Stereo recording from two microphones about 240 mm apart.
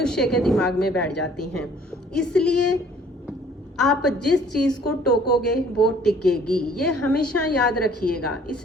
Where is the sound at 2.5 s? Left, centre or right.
Left.